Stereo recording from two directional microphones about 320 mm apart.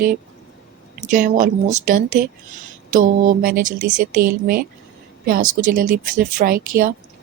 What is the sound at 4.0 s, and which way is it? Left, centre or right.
Speech, right.